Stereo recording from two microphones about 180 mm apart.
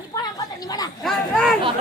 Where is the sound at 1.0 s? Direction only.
Centre (ahead or behind).